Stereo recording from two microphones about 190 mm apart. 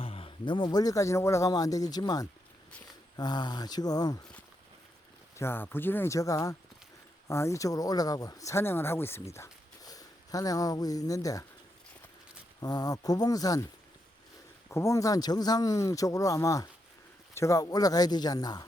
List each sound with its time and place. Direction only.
0.0 s speech: 30° left (ahead or behind)
5.4 s speech: 10° left (ahead or behind)
12.5 s speech: 20° left (ahead or behind)
14.7 s speech: 15° left (ahead or behind)